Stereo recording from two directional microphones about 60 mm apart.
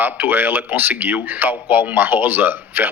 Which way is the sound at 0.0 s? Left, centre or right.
Right.